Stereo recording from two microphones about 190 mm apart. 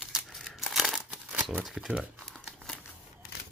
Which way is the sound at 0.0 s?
Centre (ahead or behind).